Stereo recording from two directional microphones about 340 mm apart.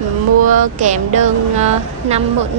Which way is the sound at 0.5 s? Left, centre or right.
Right.